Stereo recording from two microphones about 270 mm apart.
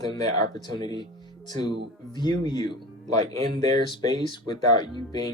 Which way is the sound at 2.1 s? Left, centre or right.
Centre.